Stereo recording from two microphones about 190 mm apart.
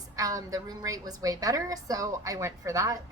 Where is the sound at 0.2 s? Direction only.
20° right (ahead or behind).